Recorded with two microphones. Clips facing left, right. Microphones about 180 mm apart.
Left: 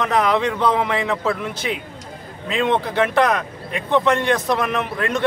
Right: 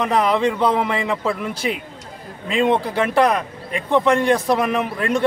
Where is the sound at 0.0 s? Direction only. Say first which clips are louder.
Right 1 dB; 5° right (ahead or behind).